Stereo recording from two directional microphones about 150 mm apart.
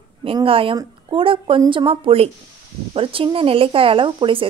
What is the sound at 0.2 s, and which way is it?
A woman's voice, 35° right (ahead or behind).